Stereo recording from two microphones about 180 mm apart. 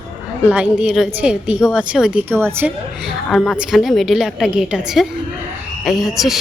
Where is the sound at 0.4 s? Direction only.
5° right (ahead or behind).